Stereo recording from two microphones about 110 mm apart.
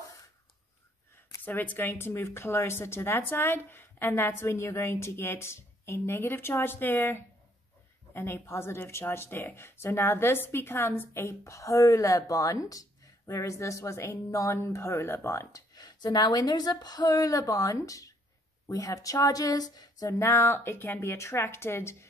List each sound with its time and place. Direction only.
1.4 s a woman's voice: 15° left (ahead or behind)